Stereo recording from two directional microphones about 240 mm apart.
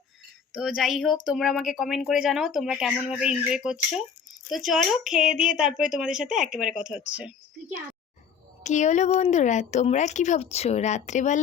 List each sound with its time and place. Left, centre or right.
0.5 s speech: centre
8.6 s speech: left